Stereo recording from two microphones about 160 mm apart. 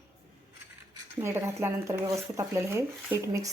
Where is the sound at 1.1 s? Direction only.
15° right (ahead or behind).